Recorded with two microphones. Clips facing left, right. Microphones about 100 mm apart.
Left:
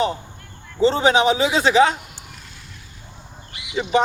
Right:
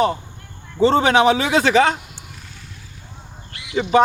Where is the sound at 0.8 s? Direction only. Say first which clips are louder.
Right 2 dB; 55° right (ahead or behind).